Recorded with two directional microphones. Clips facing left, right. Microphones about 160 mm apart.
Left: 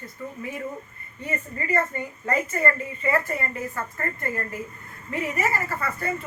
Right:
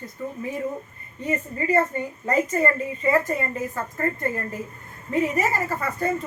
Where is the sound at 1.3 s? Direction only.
20° right (ahead or behind).